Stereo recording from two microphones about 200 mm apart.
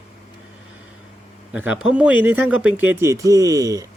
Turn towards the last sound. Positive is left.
turn(degrees=-15)  # may be behind; listen again after turning